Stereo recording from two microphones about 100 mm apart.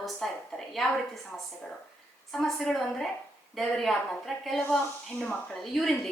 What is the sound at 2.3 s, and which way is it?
A woman's voice, 5° left (ahead or behind).